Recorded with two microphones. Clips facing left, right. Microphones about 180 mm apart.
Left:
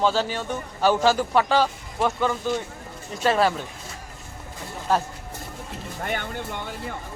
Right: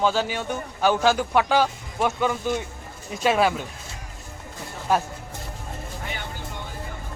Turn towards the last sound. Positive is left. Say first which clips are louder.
# left 5 dB
turn(degrees=55)  # may be behind; listen again after turning